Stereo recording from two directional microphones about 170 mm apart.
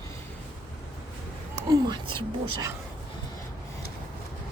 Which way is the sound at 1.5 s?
25° right (ahead or behind).